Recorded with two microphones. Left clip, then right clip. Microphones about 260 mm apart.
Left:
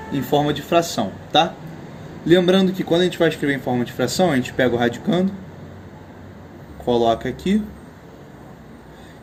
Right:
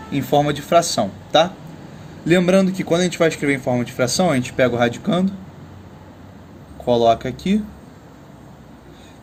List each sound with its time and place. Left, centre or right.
0.1 s speech: right
6.8 s speech: right